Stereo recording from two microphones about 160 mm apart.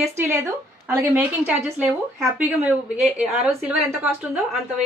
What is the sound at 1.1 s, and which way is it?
A woman's voice, 10° right (ahead or behind).